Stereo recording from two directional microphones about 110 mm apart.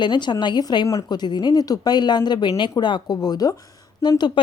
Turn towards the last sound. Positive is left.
turn(degrees=40)  # may be behind; listen again after turning